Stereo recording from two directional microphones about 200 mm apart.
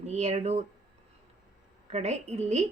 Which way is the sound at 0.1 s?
35° right (ahead or behind).